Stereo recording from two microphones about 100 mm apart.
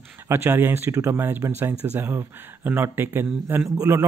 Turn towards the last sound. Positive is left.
turn(degrees=-25)  # may be behind; listen again after turning